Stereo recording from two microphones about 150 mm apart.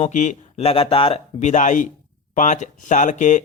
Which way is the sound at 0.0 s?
50° left (ahead or behind).